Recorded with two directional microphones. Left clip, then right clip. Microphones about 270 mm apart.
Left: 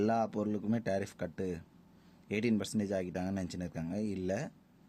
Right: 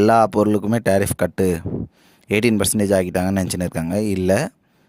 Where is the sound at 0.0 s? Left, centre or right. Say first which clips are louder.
Right 18 dB; right.